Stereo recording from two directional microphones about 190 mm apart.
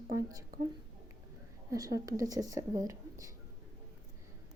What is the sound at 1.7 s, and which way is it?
A woman's voice, 20° right (ahead or behind).